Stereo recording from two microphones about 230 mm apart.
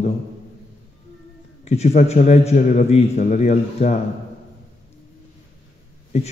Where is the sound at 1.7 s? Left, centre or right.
Left.